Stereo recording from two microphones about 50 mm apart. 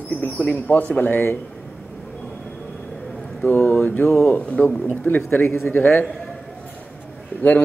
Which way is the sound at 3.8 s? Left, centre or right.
Left.